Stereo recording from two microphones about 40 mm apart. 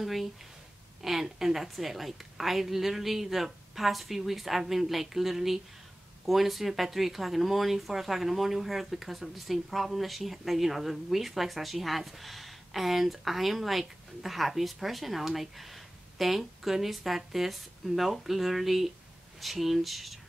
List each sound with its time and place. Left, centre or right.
0.0 s speech: centre